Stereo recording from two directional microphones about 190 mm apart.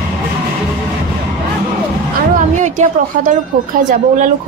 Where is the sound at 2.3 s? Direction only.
40° right (ahead or behind).